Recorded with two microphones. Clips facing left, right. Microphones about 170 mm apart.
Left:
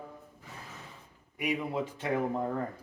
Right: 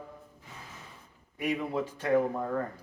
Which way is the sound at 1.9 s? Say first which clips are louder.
Right 6 dB; 20° left (ahead or behind).